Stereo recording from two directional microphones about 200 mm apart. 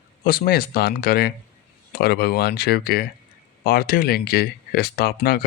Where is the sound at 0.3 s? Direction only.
50° left (ahead or behind).